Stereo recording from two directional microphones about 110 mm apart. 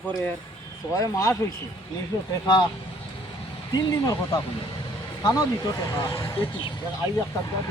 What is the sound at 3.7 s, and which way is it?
Speech, 35° left (ahead or behind).